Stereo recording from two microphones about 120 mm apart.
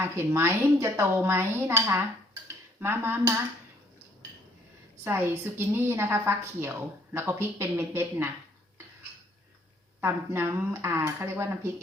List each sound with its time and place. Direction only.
0.0 s a woman's voice: 20° right (ahead or behind)
5.0 s a woman's voice: 20° right (ahead or behind)
10.0 s a woman's voice: 20° right (ahead or behind)